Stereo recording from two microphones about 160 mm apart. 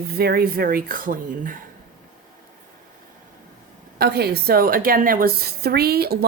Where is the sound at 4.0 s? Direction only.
70° right (ahead or behind).